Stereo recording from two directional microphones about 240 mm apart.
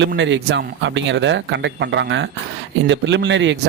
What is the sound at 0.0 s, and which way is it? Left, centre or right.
Speech, right.